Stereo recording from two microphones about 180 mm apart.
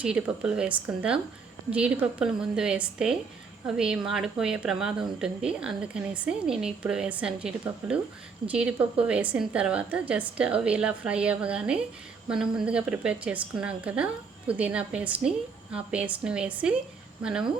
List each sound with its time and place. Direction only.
0.0 s a woman's voice: 5° right (ahead or behind)